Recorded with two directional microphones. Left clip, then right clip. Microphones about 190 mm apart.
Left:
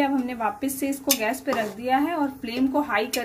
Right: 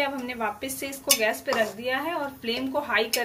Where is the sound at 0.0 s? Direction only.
45° left (ahead or behind).